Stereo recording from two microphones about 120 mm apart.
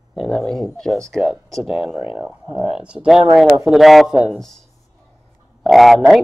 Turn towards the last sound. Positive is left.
turn(degrees=0)  # may be behind; listen again after turning